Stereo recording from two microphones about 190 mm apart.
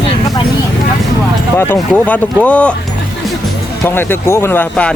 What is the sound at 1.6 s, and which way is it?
Speech, 10° left (ahead or behind).